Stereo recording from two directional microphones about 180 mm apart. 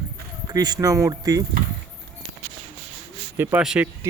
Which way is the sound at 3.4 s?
10° right (ahead or behind).